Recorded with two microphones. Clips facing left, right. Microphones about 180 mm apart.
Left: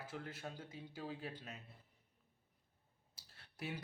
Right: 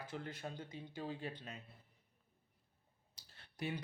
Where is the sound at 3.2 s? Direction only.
5° left (ahead or behind).